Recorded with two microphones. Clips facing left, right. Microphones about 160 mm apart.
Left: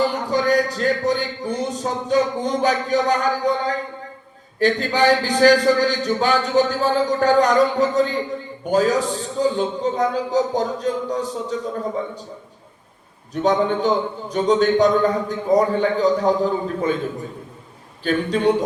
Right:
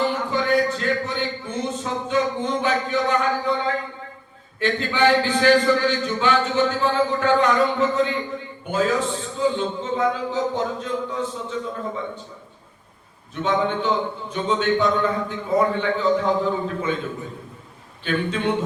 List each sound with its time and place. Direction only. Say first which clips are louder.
0.1 s speech: left 2 dB; 40° left (ahead or behind)
4.6 s a man's voice: left 3 dB; 40° left (ahead or behind)
13.3 s a man's voice: left 4 dB; 40° left (ahead or behind)
18.0 s a man's voice: left 5 dB; 40° left (ahead or behind)